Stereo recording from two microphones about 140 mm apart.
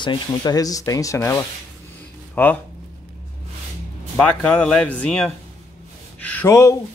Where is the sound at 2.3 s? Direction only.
10° left (ahead or behind).